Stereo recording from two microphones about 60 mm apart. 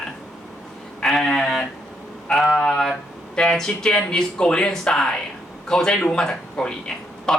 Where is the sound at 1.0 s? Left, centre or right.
Centre.